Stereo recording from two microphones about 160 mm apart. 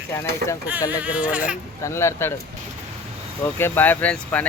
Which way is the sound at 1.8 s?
15° left (ahead or behind).